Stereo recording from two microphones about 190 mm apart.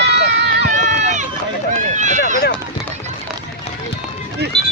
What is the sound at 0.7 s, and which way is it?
Run, 40° right (ahead or behind).